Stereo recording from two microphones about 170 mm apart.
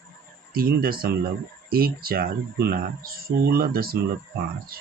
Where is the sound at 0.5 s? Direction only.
60° right (ahead or behind).